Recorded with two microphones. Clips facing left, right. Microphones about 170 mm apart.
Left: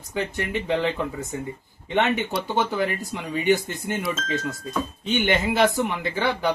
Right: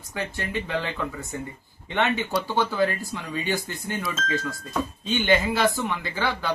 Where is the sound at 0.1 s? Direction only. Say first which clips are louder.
Left 3 dB; 20° left (ahead or behind).